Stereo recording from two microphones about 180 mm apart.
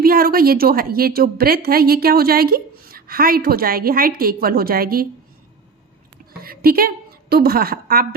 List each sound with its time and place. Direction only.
0.0 s a woman's voice: 55° right (ahead or behind)
6.4 s a woman's voice: 55° right (ahead or behind)